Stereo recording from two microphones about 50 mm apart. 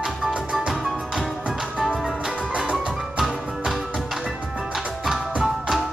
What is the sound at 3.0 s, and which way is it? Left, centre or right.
Music, centre.